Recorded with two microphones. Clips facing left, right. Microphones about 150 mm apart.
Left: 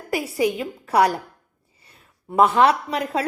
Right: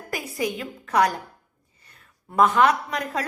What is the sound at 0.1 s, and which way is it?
A woman's voice, 30° left (ahead or behind).